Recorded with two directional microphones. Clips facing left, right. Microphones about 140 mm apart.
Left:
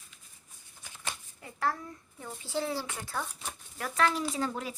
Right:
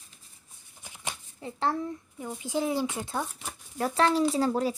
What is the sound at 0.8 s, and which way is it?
Shuffling cards, 15° right (ahead or behind).